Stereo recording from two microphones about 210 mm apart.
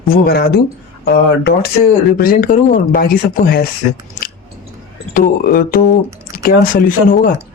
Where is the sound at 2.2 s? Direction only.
45° left (ahead or behind).